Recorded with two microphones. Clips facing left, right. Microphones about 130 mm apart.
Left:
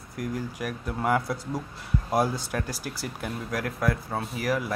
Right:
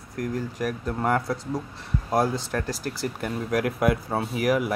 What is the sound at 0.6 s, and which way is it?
Speech, 5° left (ahead or behind).